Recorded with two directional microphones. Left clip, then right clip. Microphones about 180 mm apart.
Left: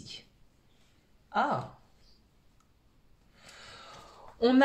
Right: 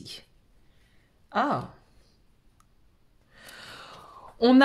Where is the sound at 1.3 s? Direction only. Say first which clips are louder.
Right 3 dB; 50° right (ahead or behind).